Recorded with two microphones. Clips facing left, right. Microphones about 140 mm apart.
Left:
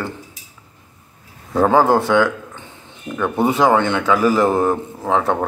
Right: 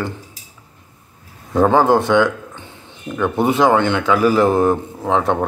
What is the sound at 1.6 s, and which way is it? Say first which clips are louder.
A man's voice: right 1 dB; 5° left (ahead or behind).